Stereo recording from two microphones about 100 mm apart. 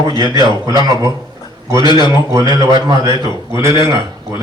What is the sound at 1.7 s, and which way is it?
Speech, 50° left (ahead or behind).